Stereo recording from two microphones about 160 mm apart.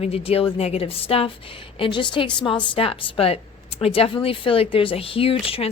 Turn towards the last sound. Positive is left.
turn(degrees=35)  # may be behind; listen again after turning